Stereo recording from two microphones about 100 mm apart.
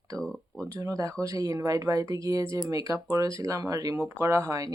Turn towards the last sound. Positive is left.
turn(degrees=-30)  # may be behind; listen again after turning